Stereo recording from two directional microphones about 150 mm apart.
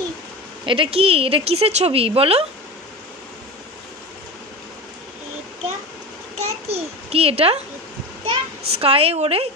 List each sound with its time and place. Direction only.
0.7 s a woman's voice: 35° right (ahead or behind)
6.3 s babbling: 45° right (ahead or behind)
8.3 s a child's voice: 40° right (ahead or behind)